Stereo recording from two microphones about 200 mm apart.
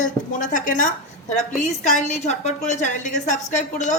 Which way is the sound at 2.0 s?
35° left (ahead or behind).